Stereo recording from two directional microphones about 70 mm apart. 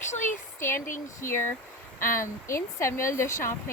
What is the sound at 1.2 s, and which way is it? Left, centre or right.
Speech, left.